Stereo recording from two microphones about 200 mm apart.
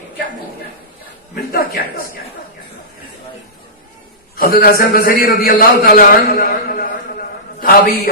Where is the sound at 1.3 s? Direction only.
50° left (ahead or behind).